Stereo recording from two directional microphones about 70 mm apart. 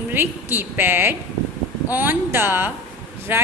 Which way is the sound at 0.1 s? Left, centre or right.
Right.